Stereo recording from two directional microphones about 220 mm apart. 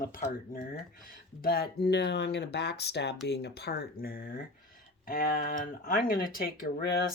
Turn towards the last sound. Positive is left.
turn(degrees=45)  # may be behind; listen again after turning